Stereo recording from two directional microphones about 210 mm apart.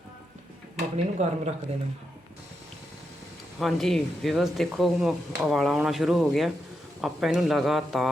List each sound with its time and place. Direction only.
0.9 s speech: 30° right (ahead or behind)
3.6 s speech: centre (ahead or behind)